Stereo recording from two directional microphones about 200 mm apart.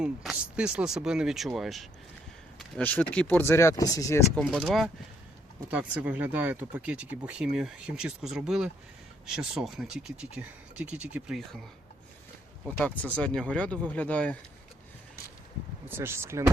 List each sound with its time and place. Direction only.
0.0 s speech: 5° right (ahead or behind); by 4.4 s 15° left (ahead or behind)
4.4 s speech: centre (ahead or behind)
12.6 s speech: 5° left (ahead or behind)
15.9 s speech: 10° right (ahead or behind)